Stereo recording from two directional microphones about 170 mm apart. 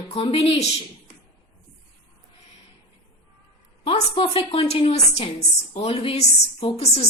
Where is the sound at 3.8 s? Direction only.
30° left (ahead or behind).